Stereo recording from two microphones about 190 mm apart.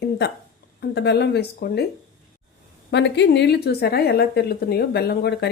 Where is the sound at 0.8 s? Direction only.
60° left (ahead or behind).